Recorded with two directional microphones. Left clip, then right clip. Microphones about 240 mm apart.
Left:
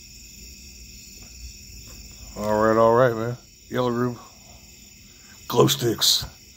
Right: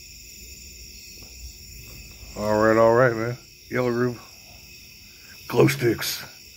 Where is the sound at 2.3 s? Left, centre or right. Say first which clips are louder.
Right 1 dB; centre.